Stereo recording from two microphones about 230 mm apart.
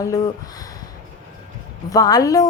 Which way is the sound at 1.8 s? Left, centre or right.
Centre.